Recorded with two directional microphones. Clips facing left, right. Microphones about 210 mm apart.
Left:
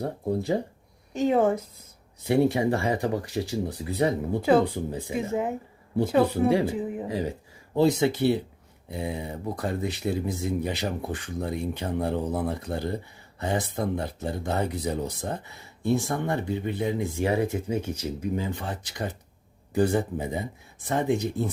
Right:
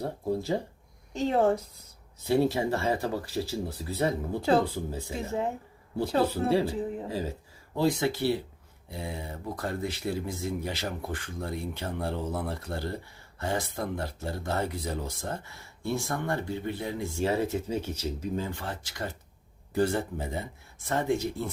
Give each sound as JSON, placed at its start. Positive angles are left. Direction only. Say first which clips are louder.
{"t": 1.2, "sound": "speech", "louder": "left 3 dB", "side_deg": 15}